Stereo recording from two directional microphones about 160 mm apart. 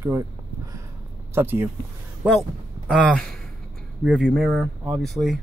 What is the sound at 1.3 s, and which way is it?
Speech, 15° right (ahead or behind).